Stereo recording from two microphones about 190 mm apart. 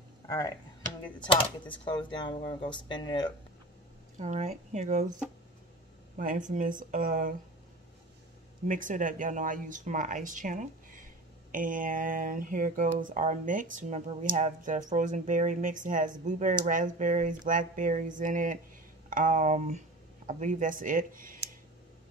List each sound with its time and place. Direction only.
0.3 s speech: 20° left (ahead or behind)
1.9 s speech: 25° left (ahead or behind)
4.2 s speech: 40° right (ahead or behind)
6.1 s speech: 40° right (ahead or behind)
8.6 s speech: 45° right (ahead or behind)